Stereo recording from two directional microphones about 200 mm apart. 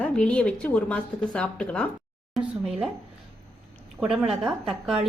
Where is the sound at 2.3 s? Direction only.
5° right (ahead or behind).